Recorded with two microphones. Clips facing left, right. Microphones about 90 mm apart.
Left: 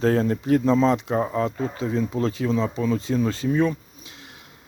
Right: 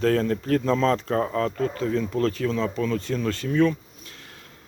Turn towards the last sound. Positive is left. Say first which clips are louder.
# right 1 dB
turn(degrees=15)  # may be behind; listen again after turning